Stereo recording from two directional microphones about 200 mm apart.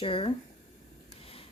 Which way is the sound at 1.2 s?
30° left (ahead or behind).